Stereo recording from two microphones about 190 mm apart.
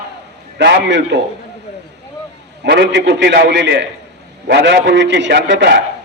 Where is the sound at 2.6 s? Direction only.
65° right (ahead or behind).